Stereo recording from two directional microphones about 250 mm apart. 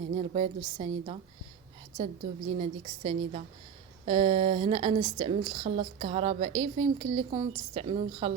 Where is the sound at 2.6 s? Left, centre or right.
Centre.